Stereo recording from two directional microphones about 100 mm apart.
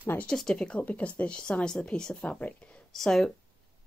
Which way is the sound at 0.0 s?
20° left (ahead or behind).